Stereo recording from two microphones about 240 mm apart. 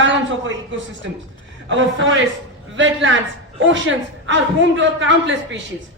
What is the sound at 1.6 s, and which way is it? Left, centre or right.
Speech, right.